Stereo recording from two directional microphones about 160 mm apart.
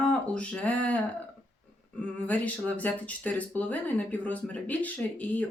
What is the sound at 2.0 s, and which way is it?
Speech, 10° left (ahead or behind).